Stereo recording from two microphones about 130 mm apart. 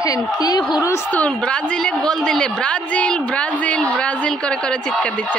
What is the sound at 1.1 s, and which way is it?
Speech, 10° left (ahead or behind).